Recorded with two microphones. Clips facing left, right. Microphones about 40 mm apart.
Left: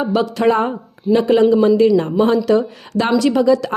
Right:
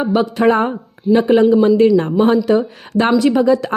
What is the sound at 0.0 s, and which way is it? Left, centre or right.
A woman's voice, right.